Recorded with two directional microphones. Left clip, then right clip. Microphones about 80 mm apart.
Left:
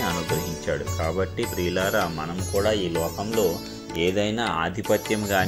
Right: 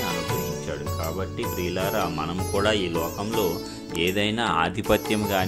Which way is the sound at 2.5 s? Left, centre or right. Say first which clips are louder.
Even; right.